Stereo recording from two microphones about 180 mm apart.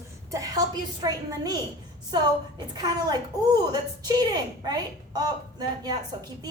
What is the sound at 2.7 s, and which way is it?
A woman's voice, 25° right (ahead or behind).